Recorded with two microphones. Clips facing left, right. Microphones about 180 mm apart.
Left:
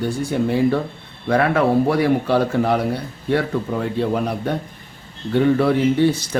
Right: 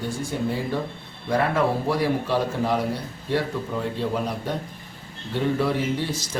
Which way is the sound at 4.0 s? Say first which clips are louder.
Left 5 dB; 60° left (ahead or behind).